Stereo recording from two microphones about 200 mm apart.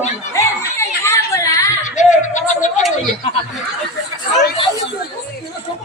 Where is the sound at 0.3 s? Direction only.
15° left (ahead or behind).